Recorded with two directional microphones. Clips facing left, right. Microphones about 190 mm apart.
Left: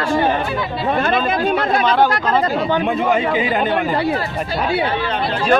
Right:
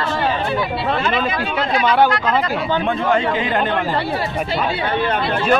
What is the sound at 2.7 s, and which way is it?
Speech, 10° left (ahead or behind).